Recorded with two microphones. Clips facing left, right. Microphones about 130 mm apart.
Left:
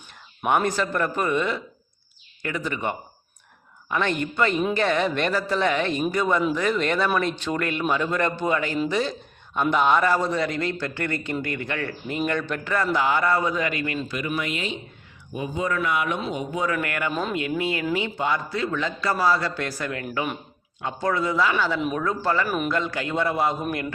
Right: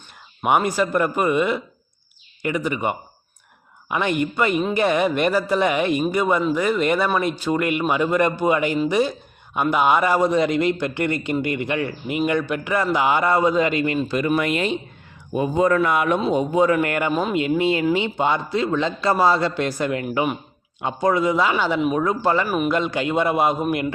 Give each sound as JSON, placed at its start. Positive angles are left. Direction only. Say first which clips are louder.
{"t": 0.4, "sound": "a man's voice", "louder": "right 3 dB", "side_deg": -10}
{"t": 14.2, "sound": "speech", "louder": "right 9 dB", "side_deg": -50}
{"t": 16.2, "sound": "a man's voice", "louder": "right 9 dB", "side_deg": -30}
{"t": 22.4, "sound": "a man's voice", "louder": "right 4 dB", "side_deg": -5}
{"t": 22.7, "sound": "a man's voice", "louder": "right 5 dB", "side_deg": -20}